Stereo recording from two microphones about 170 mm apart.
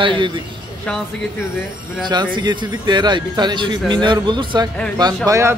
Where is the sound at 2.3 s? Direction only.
25° right (ahead or behind).